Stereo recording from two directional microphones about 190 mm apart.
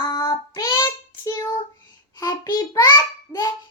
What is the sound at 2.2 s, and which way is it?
Child singing, 20° left (ahead or behind).